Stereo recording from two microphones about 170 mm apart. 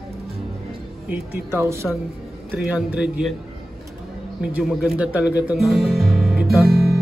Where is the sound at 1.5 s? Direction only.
15° right (ahead or behind).